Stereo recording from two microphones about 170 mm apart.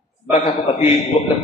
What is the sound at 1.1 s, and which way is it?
Speech, 30° left (ahead or behind).